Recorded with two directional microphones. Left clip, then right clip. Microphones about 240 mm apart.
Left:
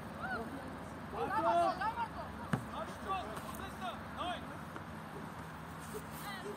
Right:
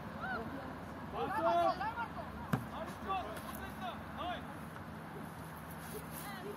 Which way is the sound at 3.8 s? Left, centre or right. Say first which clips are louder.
Left 1 dB; centre.